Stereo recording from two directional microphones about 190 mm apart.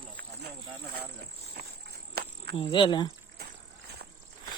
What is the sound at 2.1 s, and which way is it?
Cricket, 60° right (ahead or behind).